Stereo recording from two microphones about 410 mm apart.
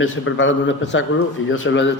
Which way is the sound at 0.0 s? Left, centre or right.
Left.